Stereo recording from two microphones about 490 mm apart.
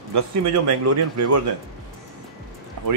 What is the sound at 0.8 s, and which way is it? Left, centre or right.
Speech, right.